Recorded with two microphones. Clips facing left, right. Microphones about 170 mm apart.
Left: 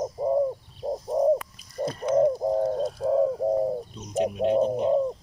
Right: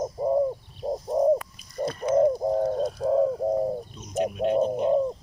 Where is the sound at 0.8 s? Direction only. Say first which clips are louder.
Even; centre (ahead or behind).